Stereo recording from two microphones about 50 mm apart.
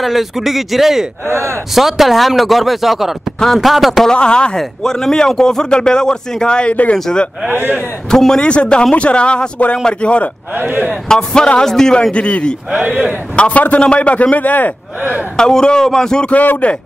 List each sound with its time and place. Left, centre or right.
0.0 s speech: centre
1.3 s speech: right
1.8 s speech: centre
4.1 s a man's voice: centre
7.5 s a man's voice: right
8.1 s a man's voice: centre
8.5 s a man's voice: left
10.5 s a man's voice: right
11.1 s a man's voice: centre; by 14.7 s left
15.3 s a man's voice: centre
16.3 s speech: left